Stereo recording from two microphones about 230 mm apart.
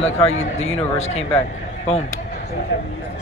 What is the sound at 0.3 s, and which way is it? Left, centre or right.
Speech, left.